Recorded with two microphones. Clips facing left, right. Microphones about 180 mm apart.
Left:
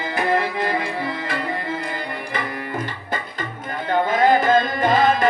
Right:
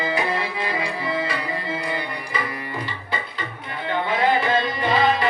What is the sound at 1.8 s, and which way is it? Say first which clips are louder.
Tabla: even; 50° left (ahead or behind).